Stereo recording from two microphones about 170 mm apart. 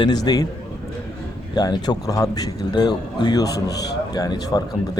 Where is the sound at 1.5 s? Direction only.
25° left (ahead or behind).